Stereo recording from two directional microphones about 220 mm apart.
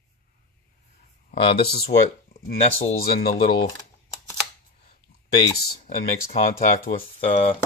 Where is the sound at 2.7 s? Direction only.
30° left (ahead or behind).